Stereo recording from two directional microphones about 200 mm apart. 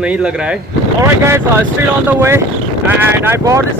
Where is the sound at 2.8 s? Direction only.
10° right (ahead or behind).